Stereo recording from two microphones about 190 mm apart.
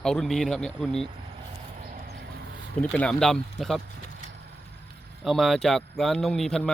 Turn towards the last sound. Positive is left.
turn(degrees=0)  # may be behind; listen again after turning